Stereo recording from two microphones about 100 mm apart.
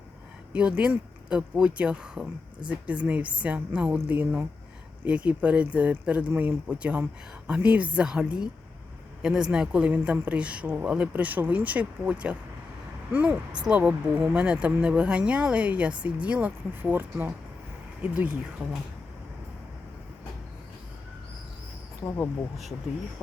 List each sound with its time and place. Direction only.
0.5 s speech: 10° right (ahead or behind)